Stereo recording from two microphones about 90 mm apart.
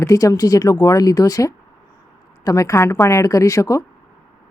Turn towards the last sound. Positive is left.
turn(degrees=35)  # may be behind; listen again after turning